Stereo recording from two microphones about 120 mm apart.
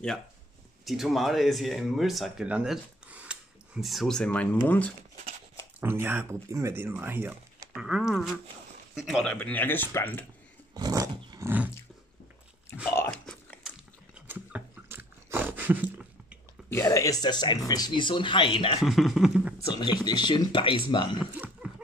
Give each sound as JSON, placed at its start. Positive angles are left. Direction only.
{"t": 0.8, "sound": "speech", "side_deg": 0}
{"t": 5.8, "sound": "speech", "side_deg": -20}
{"t": 7.7, "sound": "speech", "side_deg": -5}
{"t": 9.3, "sound": "speech", "side_deg": 10}
{"t": 10.8, "sound": "roar", "side_deg": -30}
{"t": 12.8, "sound": "biting", "side_deg": 20}
{"t": 13.1, "sound": "biting", "side_deg": 5}
{"t": 14.2, "sound": "a sound", "side_deg": -15}
{"t": 16.8, "sound": "a sound", "side_deg": 30}
{"t": 17.6, "sound": "speech", "side_deg": 35}
{"t": 18.8, "sound": "speech", "side_deg": 0}
{"t": 19.7, "sound": "speech", "side_deg": 40}